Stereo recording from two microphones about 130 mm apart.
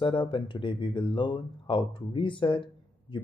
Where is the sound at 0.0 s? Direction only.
40° left (ahead or behind).